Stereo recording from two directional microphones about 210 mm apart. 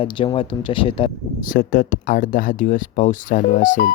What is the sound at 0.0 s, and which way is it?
Speech, 25° left (ahead or behind).